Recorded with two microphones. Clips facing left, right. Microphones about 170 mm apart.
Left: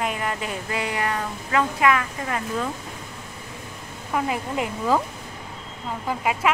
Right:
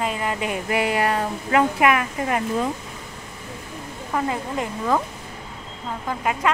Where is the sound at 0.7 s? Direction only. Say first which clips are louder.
Right 5 dB; 25° right (ahead or behind).